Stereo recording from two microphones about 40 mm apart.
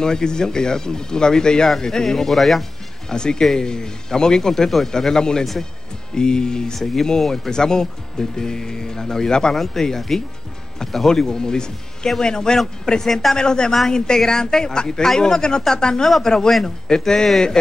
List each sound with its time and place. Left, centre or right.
0.0 s speech: centre
3.1 s a man's voice: centre
5.4 s speech: centre
6.1 s a man's voice: centre
13.4 s a man's voice: centre